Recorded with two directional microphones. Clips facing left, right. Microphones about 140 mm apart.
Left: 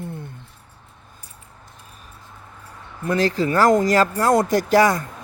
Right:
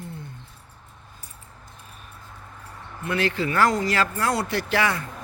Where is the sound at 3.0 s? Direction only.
35° left (ahead or behind).